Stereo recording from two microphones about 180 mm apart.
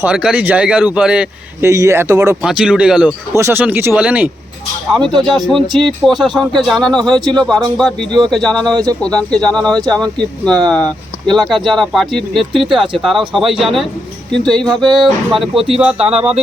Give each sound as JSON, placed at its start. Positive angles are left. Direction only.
{"t": 0.0, "sound": "a man's voice", "side_deg": -5}
{"t": 2.4, "sound": "a man's voice", "side_deg": -5}
{"t": 4.9, "sound": "speech", "side_deg": 5}
{"t": 14.8, "sound": "speech", "side_deg": -25}
{"t": 15.0, "sound": "speech", "side_deg": 0}